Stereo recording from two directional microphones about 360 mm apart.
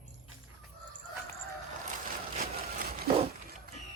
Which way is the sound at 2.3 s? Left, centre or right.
Right.